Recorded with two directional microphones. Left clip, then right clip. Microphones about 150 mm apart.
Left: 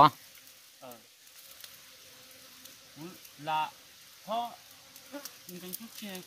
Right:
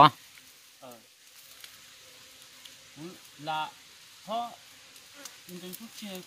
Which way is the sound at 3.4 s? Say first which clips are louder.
Left 1 dB; centre (ahead or behind).